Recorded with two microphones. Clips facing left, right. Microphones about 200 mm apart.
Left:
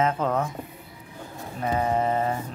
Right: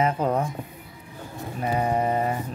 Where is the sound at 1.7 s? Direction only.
15° right (ahead or behind).